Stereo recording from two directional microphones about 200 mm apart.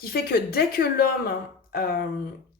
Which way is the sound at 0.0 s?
50° left (ahead or behind).